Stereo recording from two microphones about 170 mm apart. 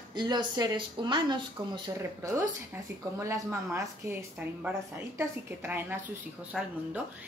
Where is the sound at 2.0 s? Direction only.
15° right (ahead or behind).